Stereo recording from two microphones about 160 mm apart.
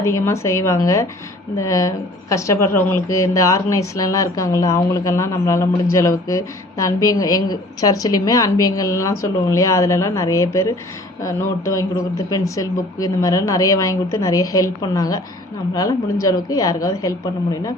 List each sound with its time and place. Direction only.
0.0 s a woman's voice: 20° left (ahead or behind)